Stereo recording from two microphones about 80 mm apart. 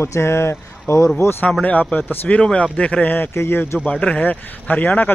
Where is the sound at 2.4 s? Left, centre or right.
Centre; by 3.8 s left.